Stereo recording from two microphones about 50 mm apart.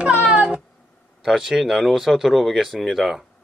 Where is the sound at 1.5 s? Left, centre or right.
Centre.